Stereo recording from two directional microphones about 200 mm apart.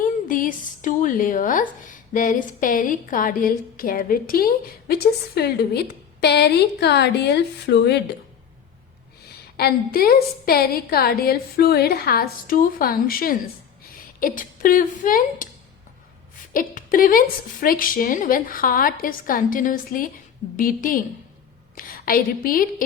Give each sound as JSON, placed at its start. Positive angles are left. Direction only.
{"t": 0.0, "sound": "a woman's voice", "side_deg": 40}
{"t": 9.6, "sound": "a woman's voice", "side_deg": 50}
{"t": 16.5, "sound": "a woman's voice", "side_deg": 45}